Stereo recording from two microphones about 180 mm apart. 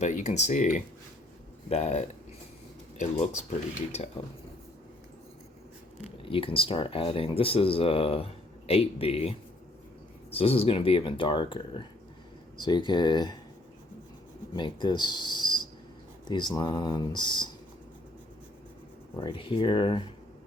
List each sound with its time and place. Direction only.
0.0 s speech: 40° left (ahead or behind)
6.2 s speech: 30° left (ahead or behind)
10.3 s speech: 35° left (ahead or behind)
14.5 s speech: 25° left (ahead or behind)
19.1 s speech: 25° left (ahead or behind)